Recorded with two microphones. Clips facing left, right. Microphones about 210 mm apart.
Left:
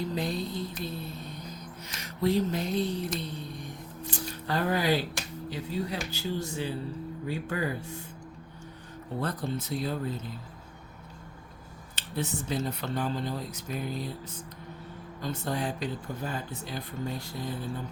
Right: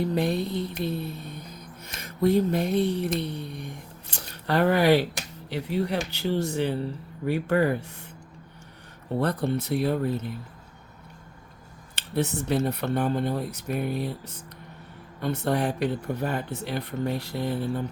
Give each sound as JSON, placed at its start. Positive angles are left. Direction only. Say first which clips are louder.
{"t": 0.0, "sound": "speech", "louder": "right 6 dB", "side_deg": -60}
{"t": 9.2, "sound": "speech", "louder": "right 6 dB", "side_deg": -65}
{"t": 12.1, "sound": "speech", "louder": "right 6 dB", "side_deg": -65}
{"t": 15.2, "sound": "speech", "louder": "right 6 dB", "side_deg": -65}